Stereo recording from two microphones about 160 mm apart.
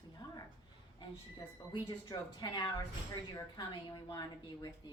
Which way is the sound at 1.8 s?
30° left (ahead or behind).